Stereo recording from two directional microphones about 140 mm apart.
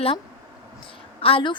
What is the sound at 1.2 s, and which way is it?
Speech, 40° left (ahead or behind).